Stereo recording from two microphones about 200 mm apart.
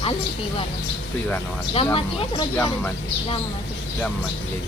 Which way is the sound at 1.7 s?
25° left (ahead or behind).